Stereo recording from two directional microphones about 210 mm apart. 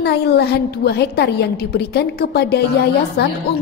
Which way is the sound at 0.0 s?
50° left (ahead or behind).